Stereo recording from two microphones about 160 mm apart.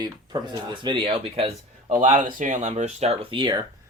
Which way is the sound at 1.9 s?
50° right (ahead or behind).